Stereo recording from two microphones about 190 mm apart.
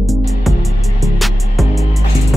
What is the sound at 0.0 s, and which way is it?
Music, centre (ahead or behind).